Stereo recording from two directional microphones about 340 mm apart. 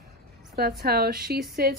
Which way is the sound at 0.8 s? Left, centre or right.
Right.